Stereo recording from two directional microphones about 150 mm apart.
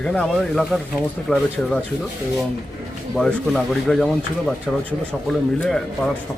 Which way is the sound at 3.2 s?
Centre (ahead or behind).